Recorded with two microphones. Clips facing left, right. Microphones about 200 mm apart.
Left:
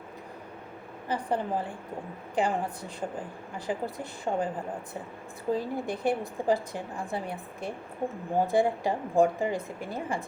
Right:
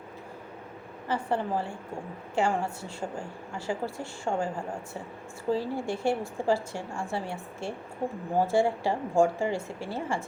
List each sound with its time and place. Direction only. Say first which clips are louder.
1.0 s a woman's voice: right 1 dB; 15° left (ahead or behind)
3.7 s a woman's voice: even; 20° left (ahead or behind)